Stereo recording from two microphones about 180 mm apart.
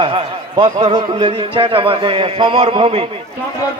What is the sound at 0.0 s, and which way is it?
A man's voice, 30° right (ahead or behind).